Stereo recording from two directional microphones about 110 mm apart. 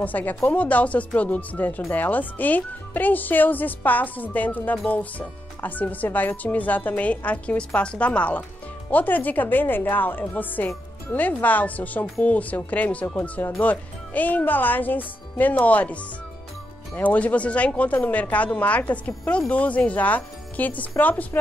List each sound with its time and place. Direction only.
0.0 s speech: 15° left (ahead or behind)